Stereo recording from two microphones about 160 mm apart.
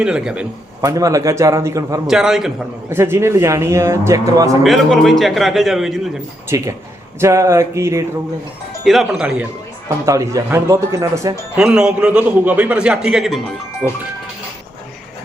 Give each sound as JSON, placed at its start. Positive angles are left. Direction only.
{"t": 0.0, "sound": "a man's voice", "side_deg": -5}
{"t": 0.8, "sound": "speech", "side_deg": -20}
{"t": 2.0, "sound": "a man's voice", "side_deg": 0}
{"t": 2.9, "sound": "speech", "side_deg": -15}
{"t": 4.6, "sound": "a man's voice", "side_deg": 0}
{"t": 6.5, "sound": "speech", "side_deg": -20}
{"t": 8.8, "sound": "a man's voice", "side_deg": 0}
{"t": 10.1, "sound": "speech", "side_deg": -20}
{"t": 11.5, "sound": "a man's voice", "side_deg": -5}
{"t": 13.8, "sound": "speech", "side_deg": -10}